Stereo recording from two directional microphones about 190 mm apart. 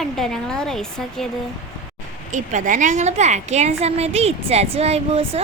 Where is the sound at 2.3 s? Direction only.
40° right (ahead or behind).